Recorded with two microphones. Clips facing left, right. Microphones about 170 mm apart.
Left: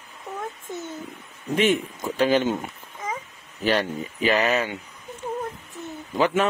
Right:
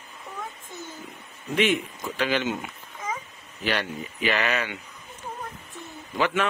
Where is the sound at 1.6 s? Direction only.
45° left (ahead or behind).